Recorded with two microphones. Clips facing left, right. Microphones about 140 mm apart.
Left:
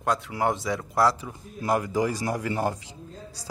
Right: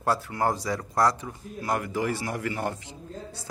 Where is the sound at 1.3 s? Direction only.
15° left (ahead or behind).